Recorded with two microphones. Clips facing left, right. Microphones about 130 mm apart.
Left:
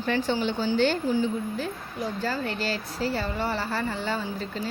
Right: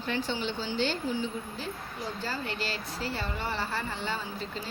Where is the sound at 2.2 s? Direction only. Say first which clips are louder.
Left 5 dB; 45° left (ahead or behind).